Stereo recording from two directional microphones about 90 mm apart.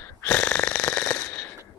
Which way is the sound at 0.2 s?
15° left (ahead or behind).